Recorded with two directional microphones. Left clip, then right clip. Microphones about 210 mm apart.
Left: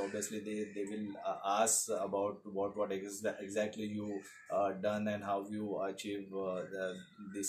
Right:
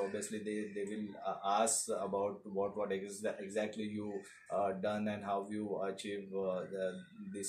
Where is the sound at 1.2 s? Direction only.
10° left (ahead or behind).